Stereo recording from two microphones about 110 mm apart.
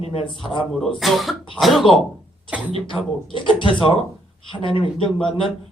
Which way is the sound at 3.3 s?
50° left (ahead or behind).